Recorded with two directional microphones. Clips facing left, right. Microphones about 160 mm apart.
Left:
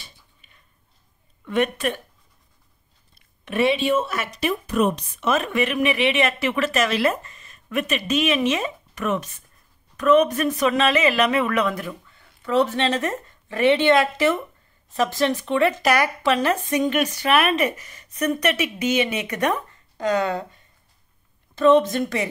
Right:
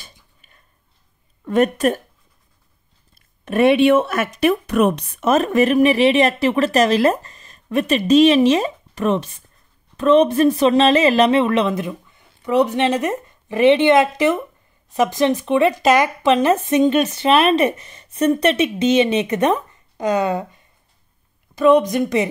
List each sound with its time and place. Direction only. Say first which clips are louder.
0.0 s a sound: right 2 dB; 45° right (ahead or behind)
1.4 s speech: right 6 dB; 40° right (ahead or behind)
3.2 s speech: right 5 dB; 45° right (ahead or behind); by 5.0 s 65° right (ahead or behind)
5.2 s a woman's voice: right 6 dB; 40° right (ahead or behind); by 22.3 s 20° right (ahead or behind)